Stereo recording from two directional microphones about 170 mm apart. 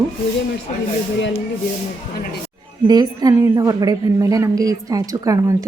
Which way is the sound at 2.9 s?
25° right (ahead or behind).